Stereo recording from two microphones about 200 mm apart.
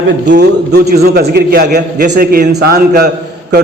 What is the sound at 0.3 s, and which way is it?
A man's voice, 55° right (ahead or behind).